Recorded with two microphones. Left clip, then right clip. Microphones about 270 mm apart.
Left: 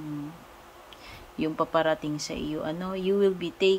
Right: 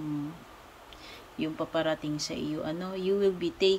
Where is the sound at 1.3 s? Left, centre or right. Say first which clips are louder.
Left 5 dB; centre.